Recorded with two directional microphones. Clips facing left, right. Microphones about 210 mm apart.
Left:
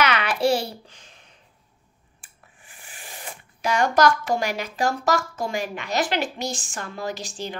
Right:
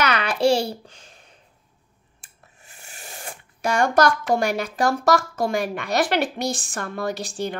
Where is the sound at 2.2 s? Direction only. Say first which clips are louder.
Right 1 dB; 40° right (ahead or behind).